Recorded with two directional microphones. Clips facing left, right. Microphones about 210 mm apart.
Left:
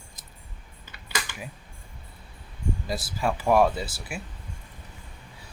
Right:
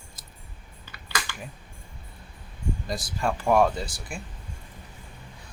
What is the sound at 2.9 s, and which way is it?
Speech, 5° left (ahead or behind).